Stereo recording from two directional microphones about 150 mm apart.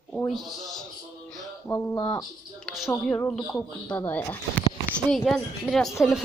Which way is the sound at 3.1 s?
15° left (ahead or behind).